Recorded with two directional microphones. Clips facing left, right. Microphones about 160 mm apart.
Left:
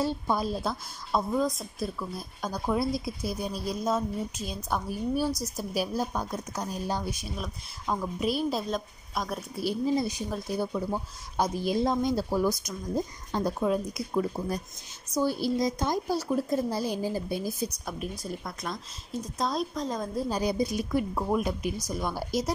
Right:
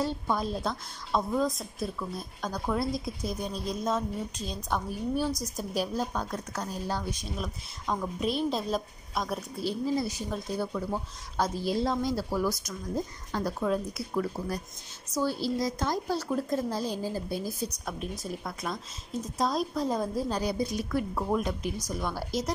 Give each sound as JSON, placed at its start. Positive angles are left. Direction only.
{"t": 0.0, "sound": "a woman's voice", "side_deg": 10}
{"t": 9.6, "sound": "a woman's voice", "side_deg": 15}
{"t": 17.8, "sound": "a woman's voice", "side_deg": 0}
{"t": 20.2, "sound": "a woman's voice", "side_deg": 10}